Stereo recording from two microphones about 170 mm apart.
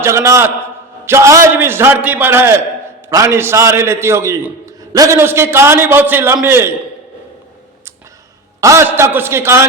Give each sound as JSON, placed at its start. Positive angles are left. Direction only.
{"t": 0.0, "sound": "a man's voice", "side_deg": -15}
{"t": 8.6, "sound": "a man's voice", "side_deg": -15}